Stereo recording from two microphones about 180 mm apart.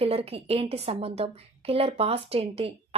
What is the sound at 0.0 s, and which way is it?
A woman's voice, 35° right (ahead or behind).